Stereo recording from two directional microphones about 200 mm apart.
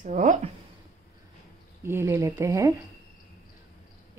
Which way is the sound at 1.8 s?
15° right (ahead or behind).